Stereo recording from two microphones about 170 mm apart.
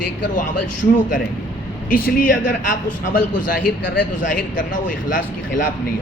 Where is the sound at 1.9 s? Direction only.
55° left (ahead or behind).